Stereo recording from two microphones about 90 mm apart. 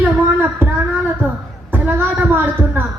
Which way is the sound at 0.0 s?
20° right (ahead or behind).